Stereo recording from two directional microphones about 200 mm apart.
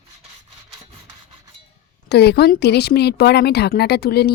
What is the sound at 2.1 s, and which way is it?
Speech, 55° left (ahead or behind).